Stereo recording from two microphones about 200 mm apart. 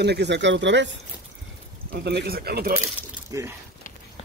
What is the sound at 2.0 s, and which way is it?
Speech, 55° right (ahead or behind).